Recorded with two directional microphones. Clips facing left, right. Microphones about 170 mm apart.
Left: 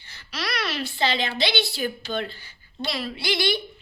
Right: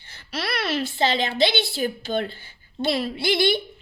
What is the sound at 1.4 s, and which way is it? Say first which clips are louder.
A woman's voice: right 3 dB; 50° right (ahead or behind).